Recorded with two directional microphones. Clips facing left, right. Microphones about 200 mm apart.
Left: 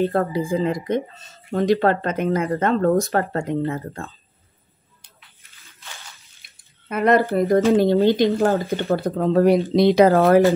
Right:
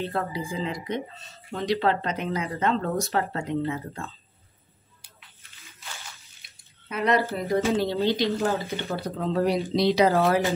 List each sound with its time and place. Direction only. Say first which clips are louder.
0.0 s speech: left 9 dB; 50° left (ahead or behind)
6.5 s water: left 6 dB; 50° left (ahead or behind)
7.2 s speech: left 8 dB; 55° left (ahead or behind)